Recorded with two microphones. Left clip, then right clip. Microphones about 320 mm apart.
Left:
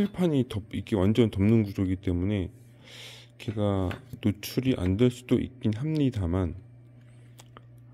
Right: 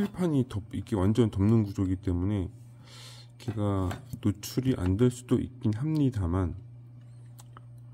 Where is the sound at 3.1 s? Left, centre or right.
Centre.